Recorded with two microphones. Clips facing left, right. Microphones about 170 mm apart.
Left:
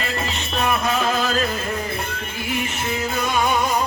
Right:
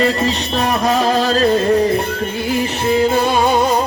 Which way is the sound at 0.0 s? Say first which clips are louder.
Right 10 dB; 35° right (ahead or behind).